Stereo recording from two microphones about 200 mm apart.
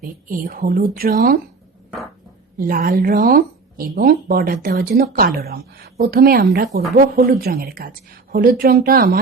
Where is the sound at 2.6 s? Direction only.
45° right (ahead or behind).